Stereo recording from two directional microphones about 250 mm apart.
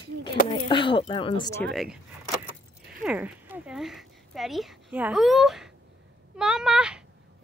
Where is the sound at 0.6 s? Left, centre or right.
Centre.